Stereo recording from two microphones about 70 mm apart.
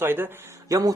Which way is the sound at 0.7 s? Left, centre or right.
Right.